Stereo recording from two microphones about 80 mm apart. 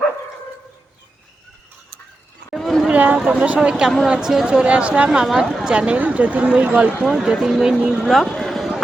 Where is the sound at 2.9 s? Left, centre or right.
Centre.